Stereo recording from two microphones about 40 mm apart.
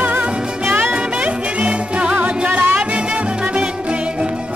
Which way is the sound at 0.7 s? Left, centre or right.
Right.